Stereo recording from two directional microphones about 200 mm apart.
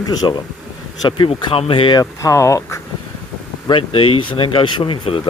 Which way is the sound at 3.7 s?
25° left (ahead or behind).